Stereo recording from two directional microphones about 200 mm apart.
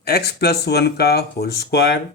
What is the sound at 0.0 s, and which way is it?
Speech, 55° left (ahead or behind).